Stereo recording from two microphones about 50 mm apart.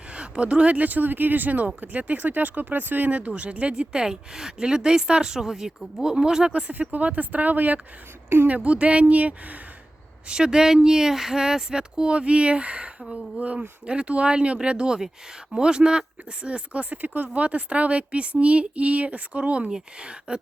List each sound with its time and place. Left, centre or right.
0.1 s speech: right
6.5 s speech: right
10.2 s speech: centre
13.4 s speech: right